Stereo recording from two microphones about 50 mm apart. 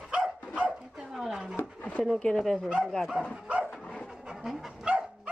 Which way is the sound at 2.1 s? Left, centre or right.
Centre.